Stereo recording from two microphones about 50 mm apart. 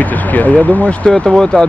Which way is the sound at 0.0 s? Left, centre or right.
Left.